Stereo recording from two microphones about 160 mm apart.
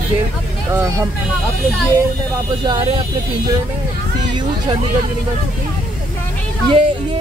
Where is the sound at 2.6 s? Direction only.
30° right (ahead or behind).